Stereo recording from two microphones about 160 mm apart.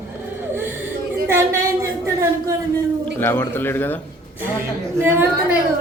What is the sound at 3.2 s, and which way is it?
Speech, 15° left (ahead or behind).